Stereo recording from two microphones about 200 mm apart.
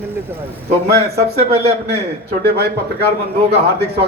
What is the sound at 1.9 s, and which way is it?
A man's voice, 55° right (ahead or behind).